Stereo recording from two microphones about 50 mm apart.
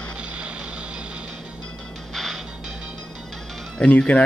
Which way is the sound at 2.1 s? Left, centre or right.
Centre.